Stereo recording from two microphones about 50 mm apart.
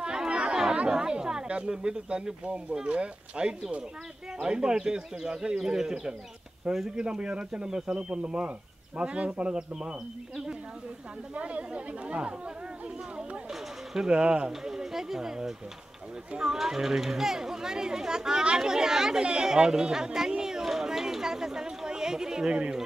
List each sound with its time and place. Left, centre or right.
0.0 s chatter: centre
0.8 s speech: centre
11.3 s speech: right
13.5 s speech: centre